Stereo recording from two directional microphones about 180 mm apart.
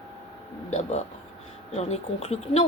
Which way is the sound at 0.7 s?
35° left (ahead or behind).